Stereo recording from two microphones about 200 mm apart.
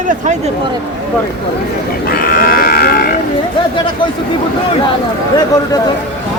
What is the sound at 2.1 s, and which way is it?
Livestock, 45° left (ahead or behind).